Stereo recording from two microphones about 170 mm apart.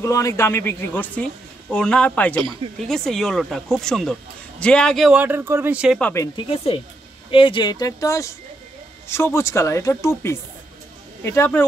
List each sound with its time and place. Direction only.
0.0 s a man's voice: 20° left (ahead or behind); by 5.9 s 5° right (ahead or behind)
5.9 s speech: 10° left (ahead or behind)
6.2 s speech: 30° left (ahead or behind); by 11.6 s 15° left (ahead or behind)